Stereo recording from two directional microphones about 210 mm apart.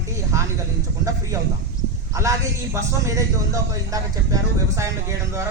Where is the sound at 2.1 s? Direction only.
15° right (ahead or behind).